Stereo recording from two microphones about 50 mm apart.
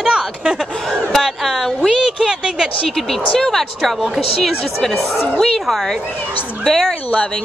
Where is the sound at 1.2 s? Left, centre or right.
Centre.